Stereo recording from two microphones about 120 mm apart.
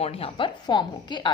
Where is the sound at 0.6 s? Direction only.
40° left (ahead or behind).